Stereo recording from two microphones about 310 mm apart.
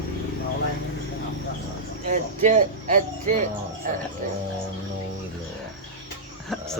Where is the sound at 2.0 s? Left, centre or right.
Right.